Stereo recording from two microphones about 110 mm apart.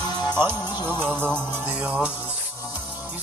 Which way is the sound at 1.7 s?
10° right (ahead or behind).